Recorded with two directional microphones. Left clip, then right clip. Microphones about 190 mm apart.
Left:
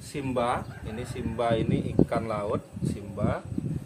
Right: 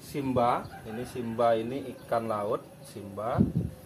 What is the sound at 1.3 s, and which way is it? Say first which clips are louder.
Speech: right 1 dB; 20° left (ahead or behind).